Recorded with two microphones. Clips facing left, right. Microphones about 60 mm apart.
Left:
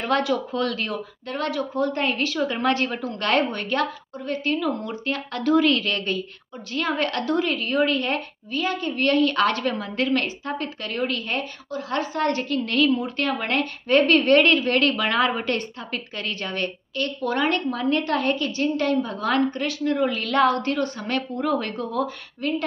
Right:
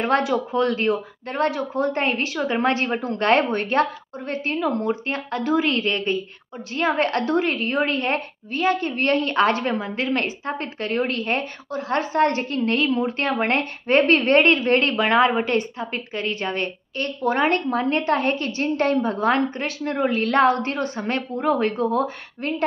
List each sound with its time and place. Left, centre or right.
0.0 s a woman's voice: right